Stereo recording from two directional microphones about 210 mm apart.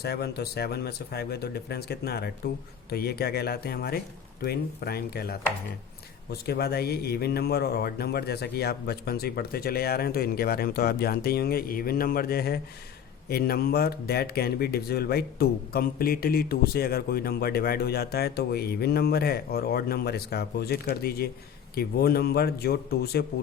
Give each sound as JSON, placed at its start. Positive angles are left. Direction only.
{"t": 0.0, "sound": "speech", "side_deg": 50}